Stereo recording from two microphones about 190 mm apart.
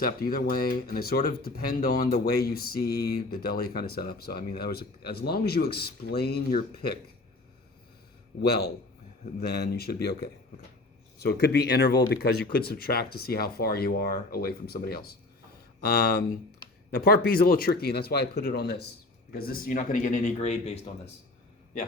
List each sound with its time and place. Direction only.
0.0 s speech: 50° left (ahead or behind)
8.4 s speech: 55° left (ahead or behind); by 20.7 s 35° left (ahead or behind)